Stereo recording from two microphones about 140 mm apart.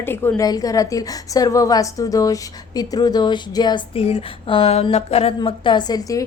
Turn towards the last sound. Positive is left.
turn(degrees=25)  # may be behind; listen again after turning